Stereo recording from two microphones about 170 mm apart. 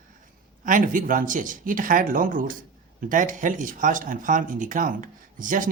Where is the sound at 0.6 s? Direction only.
50° right (ahead or behind).